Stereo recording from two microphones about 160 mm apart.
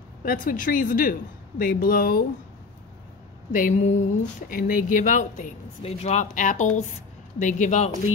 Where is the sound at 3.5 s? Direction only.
50° left (ahead or behind).